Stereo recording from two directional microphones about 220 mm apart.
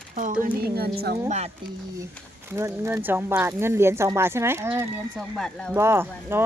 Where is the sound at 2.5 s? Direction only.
10° right (ahead or behind).